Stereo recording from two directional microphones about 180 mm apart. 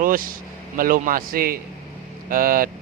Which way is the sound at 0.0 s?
50° right (ahead or behind).